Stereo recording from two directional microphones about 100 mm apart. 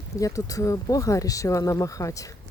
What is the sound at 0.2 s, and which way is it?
Speech, 35° left (ahead or behind).